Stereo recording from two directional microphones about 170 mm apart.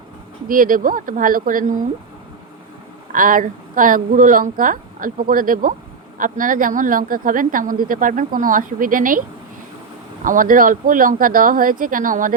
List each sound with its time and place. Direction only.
0.4 s speech: 55° right (ahead or behind)
3.1 s speech: 55° right (ahead or behind)
10.2 s speech: 55° right (ahead or behind)